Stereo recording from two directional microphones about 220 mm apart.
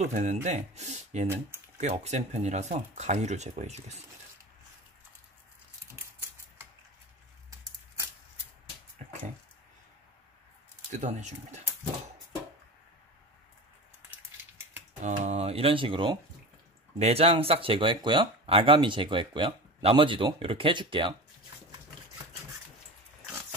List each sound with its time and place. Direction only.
0.0 s speech: 30° right (ahead or behind)
9.0 s dog: 30° right (ahead or behind)
10.9 s speech: 30° right (ahead or behind)
15.0 s speech: 35° right (ahead or behind)